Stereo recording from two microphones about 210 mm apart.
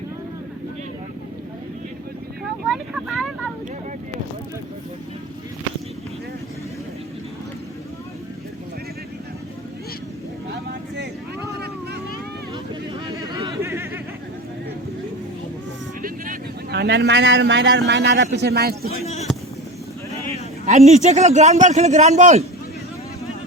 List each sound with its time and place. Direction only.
2.4 s vehicle: centre (ahead or behind)
10.5 s vehicle: 50° right (ahead or behind)
13.1 s a sound: 15° right (ahead or behind)
16.0 s a man's voice: 40° right (ahead or behind)
19.0 s a sound: 30° left (ahead or behind)
20.3 s a man's voice: 30° right (ahead or behind)